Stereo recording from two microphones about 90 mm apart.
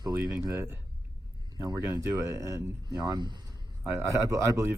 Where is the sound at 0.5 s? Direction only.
25° right (ahead or behind).